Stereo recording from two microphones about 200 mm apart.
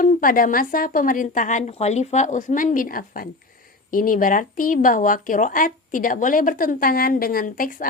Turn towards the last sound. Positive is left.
turn(degrees=45)  # may be behind; listen again after turning